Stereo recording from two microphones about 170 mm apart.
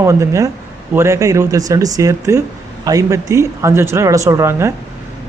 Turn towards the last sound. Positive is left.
turn(degrees=-15)  # may be behind; listen again after turning